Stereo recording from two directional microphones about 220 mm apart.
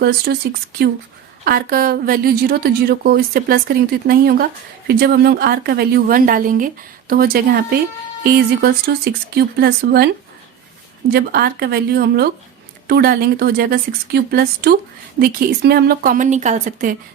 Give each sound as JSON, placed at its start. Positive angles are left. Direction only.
{"t": 0.3, "sound": "a woman's voice", "side_deg": -45}
{"t": 1.5, "sound": "a woman's voice", "side_deg": -45}
{"t": 11.1, "sound": "a woman's voice", "side_deg": -45}